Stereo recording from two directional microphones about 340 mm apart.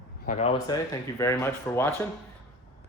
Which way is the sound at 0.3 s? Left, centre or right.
Centre.